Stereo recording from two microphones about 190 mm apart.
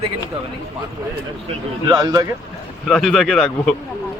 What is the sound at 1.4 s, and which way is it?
Speech, 20° right (ahead or behind).